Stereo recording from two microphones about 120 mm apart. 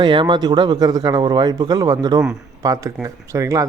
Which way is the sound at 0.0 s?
40° right (ahead or behind).